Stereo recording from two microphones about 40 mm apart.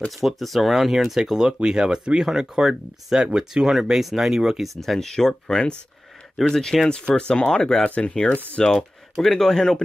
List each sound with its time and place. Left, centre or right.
0.2 s speech: centre
4.7 s speech: centre
7.8 s speech: left
9.1 s speech: centre